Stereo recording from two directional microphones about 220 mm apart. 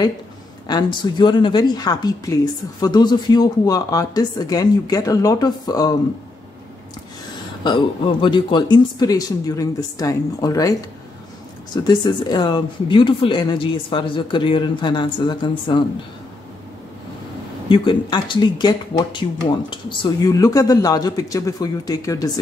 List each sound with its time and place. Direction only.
0.7 s speech: 20° left (ahead or behind)
7.6 s speech: 20° left (ahead or behind)
11.7 s speech: 20° left (ahead or behind)
17.6 s speech: 20° left (ahead or behind)